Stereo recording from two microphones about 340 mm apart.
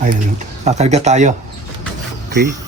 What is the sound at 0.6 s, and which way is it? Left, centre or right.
Speech, centre.